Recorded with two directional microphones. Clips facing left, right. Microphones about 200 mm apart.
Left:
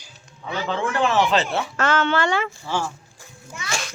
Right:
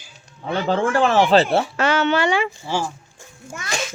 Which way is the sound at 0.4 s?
45° right (ahead or behind).